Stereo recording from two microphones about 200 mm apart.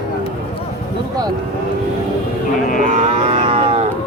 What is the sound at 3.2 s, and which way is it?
Livestock, 25° right (ahead or behind).